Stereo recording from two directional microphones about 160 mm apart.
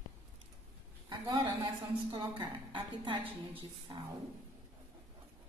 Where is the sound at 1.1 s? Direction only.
25° right (ahead or behind).